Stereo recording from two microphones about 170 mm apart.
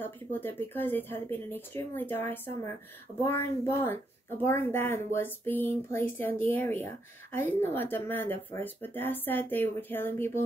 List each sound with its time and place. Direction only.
0.0 s speech: 10° left (ahead or behind)